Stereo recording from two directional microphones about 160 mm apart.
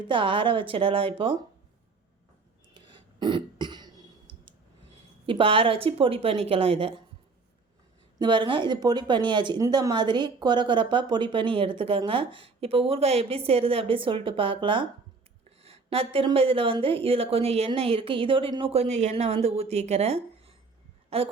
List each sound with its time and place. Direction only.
0.1 s speech: 30° right (ahead or behind)
2.7 s throat clearing: 30° right (ahead or behind)
5.2 s speech: 35° right (ahead or behind)
8.2 s speech: 30° right (ahead or behind)